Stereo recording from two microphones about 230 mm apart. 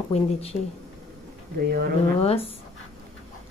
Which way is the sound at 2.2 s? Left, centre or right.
Left.